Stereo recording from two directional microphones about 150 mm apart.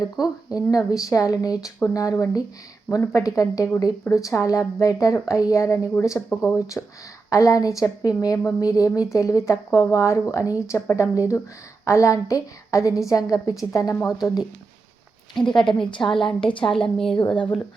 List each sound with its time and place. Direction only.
0.5 s a woman's voice: 25° left (ahead or behind)
6.3 s a woman's voice: 5° right (ahead or behind)
7.3 s a woman's voice: 20° left (ahead or behind)
15.9 s a woman's voice: 30° left (ahead or behind)
16.7 s a woman's voice: 5° left (ahead or behind)